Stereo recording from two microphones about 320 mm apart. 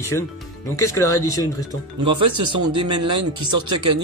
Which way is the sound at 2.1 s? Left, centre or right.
Right.